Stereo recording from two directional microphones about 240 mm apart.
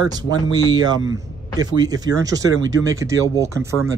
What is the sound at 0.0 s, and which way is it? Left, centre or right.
A man's voice, centre.